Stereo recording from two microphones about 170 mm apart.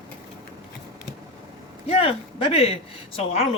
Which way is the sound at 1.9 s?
35° left (ahead or behind).